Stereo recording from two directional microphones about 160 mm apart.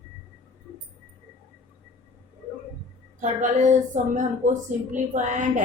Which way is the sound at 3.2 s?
50° right (ahead or behind).